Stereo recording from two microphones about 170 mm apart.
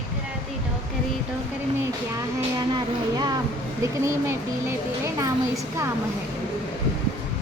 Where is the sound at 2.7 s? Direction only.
25° right (ahead or behind).